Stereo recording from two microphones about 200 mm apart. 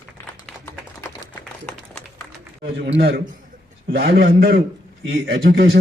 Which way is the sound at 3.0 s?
50° right (ahead or behind).